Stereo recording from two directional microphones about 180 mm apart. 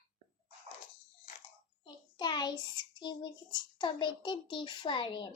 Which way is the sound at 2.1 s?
25° left (ahead or behind).